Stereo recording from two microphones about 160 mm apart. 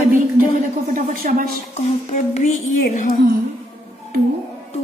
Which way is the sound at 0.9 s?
60° right (ahead or behind).